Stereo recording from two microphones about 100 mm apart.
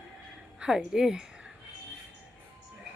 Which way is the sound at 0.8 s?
5° right (ahead or behind).